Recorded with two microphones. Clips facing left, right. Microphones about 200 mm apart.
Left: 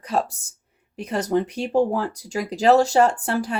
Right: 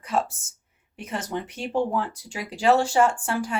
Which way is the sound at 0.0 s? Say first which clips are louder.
Left 2 dB; 35° left (ahead or behind).